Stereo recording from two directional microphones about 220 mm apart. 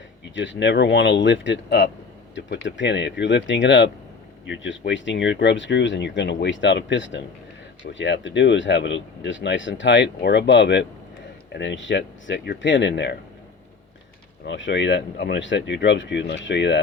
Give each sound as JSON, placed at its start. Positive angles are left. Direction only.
{"t": 0.3, "sound": "speech", "side_deg": 55}
{"t": 14.4, "sound": "speech", "side_deg": 55}